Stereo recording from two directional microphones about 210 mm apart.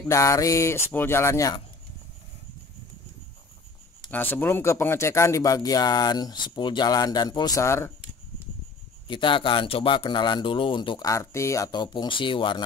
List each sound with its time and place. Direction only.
0.1 s speech: 15° left (ahead or behind)
4.1 s speech: 10° left (ahead or behind)
9.0 s a man's voice: 25° left (ahead or behind)